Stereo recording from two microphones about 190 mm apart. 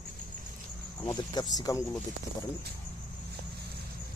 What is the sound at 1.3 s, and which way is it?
Speech, 20° left (ahead or behind).